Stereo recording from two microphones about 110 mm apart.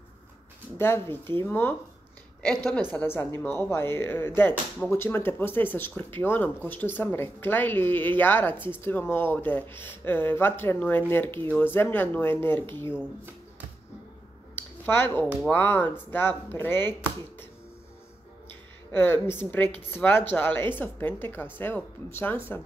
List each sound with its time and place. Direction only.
0.7 s speech: 25° left (ahead or behind)
2.9 s speech: 15° left (ahead or behind)
14.5 s a sound: 20° left (ahead or behind)
15.5 s speech: 20° left (ahead or behind)
18.9 s speech: 20° left (ahead or behind)